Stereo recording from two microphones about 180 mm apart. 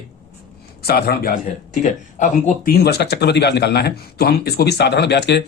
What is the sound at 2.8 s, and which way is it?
Speech, 65° left (ahead or behind).